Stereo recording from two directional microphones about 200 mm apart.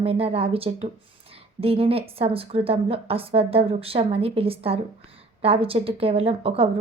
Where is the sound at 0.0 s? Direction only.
30° right (ahead or behind).